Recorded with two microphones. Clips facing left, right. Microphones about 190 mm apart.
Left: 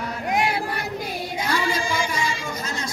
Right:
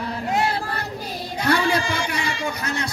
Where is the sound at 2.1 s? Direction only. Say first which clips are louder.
Right 1 dB; 65° right (ahead or behind).